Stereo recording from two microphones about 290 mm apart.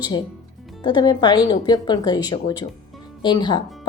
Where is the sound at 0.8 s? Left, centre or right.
Centre.